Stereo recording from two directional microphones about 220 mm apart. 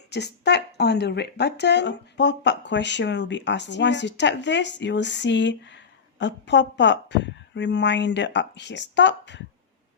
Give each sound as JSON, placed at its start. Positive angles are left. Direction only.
{"t": 0.1, "sound": "speech", "side_deg": 50}